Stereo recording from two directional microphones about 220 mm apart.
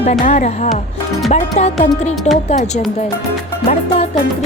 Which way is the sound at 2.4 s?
30° left (ahead or behind).